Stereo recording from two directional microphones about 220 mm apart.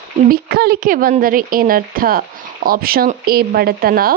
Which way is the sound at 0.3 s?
45° right (ahead or behind).